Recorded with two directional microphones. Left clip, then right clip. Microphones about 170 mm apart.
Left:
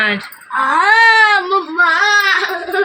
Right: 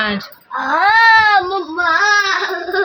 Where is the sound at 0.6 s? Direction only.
65° right (ahead or behind).